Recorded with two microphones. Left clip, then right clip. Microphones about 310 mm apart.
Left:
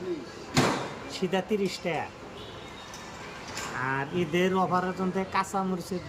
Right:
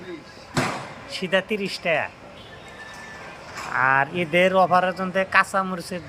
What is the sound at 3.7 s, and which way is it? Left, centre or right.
Speech, centre.